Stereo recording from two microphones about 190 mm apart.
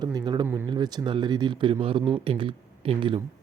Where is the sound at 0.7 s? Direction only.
20° right (ahead or behind).